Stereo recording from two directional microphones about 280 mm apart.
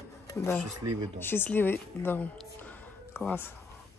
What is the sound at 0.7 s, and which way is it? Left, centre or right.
Speech, right.